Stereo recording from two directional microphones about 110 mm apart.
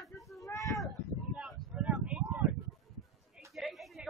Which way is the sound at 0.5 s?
30° left (ahead or behind).